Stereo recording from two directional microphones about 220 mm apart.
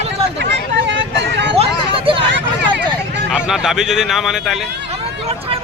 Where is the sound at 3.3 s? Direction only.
5° right (ahead or behind).